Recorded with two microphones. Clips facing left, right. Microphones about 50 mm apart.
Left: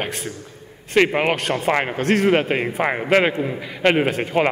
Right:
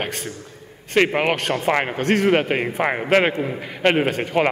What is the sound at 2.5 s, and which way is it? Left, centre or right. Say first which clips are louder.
A man's voice: even; centre.